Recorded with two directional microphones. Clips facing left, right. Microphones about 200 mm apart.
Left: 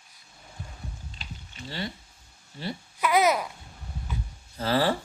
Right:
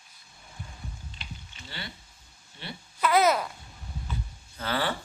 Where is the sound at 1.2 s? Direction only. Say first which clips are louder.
Left 6 dB; 35° left (ahead or behind).